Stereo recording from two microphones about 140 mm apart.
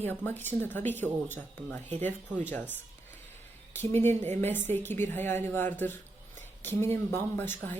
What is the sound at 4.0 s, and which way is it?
Speech, 15° left (ahead or behind).